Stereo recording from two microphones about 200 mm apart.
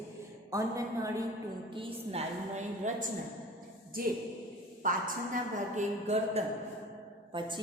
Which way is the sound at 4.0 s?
45° right (ahead or behind).